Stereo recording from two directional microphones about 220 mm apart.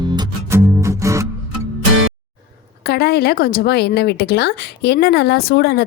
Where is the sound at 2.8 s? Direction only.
45° left (ahead or behind).